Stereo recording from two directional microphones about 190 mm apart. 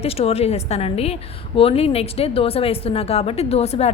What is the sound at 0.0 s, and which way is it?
A woman's voice, 30° left (ahead or behind).